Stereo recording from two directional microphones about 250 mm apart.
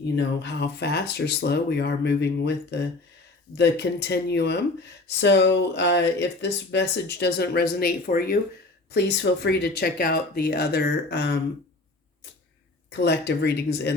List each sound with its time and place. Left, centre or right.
0.2 s speech: left
12.9 s speech: left